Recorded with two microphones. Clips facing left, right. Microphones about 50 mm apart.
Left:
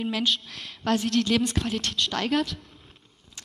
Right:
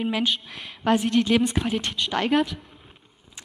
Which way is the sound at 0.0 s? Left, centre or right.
Centre.